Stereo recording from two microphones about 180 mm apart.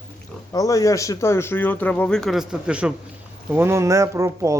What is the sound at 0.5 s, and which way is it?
A man's voice, 20° left (ahead or behind).